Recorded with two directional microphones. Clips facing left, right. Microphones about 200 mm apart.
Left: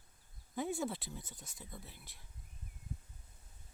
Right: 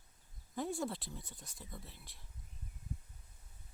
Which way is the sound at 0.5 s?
Centre (ahead or behind).